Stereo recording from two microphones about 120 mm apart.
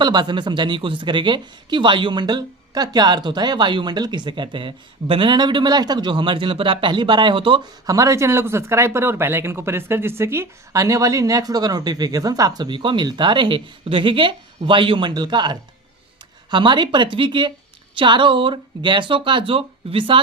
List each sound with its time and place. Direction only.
0.0 s speech: 40° right (ahead or behind)
7.9 s speech: 30° right (ahead or behind); by 20.1 s 50° right (ahead or behind)